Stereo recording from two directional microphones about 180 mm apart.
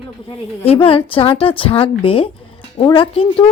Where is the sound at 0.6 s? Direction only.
30° left (ahead or behind).